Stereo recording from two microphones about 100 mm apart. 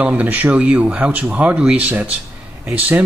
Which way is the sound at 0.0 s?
15° right (ahead or behind).